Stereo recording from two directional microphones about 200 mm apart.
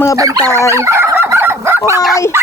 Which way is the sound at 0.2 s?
15° right (ahead or behind).